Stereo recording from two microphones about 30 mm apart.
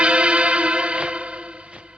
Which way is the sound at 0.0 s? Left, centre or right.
Right.